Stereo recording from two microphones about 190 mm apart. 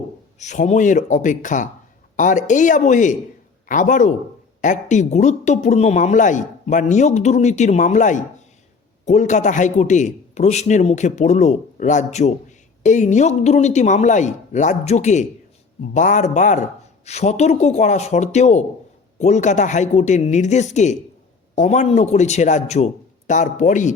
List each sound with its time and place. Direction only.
0.3 s a man's voice: 40° left (ahead or behind)